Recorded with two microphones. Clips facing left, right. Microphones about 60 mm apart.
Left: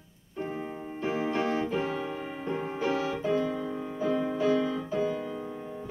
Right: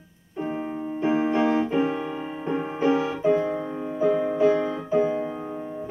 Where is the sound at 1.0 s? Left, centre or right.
Right.